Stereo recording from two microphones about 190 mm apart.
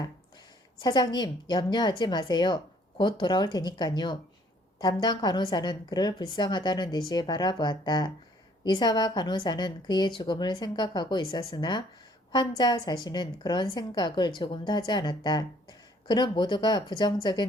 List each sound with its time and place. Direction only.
0.8 s a woman's voice: 20° left (ahead or behind)